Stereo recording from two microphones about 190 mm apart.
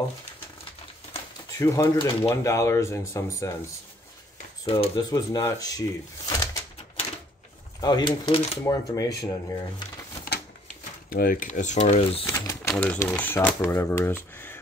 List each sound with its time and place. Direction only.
1.6 s speech: 15° left (ahead or behind)
4.6 s speech: 30° left (ahead or behind)
5.1 s speech: 20° left (ahead or behind)
7.8 s speech: 20° left (ahead or behind)
11.1 s speech: 50° left (ahead or behind); by 12.3 s 30° left (ahead or behind)
12.3 s a sound: 15° left (ahead or behind)
12.7 s speech: 5° left (ahead or behind)